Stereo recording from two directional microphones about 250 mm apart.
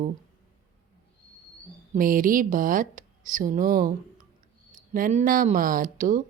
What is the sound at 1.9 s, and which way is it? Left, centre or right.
Speech, right.